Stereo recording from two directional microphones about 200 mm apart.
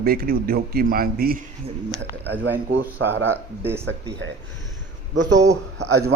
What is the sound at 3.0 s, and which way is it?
Speech, 65° right (ahead or behind).